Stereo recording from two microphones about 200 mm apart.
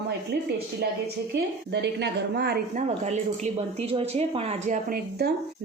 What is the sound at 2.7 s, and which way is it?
Speech, 35° right (ahead or behind).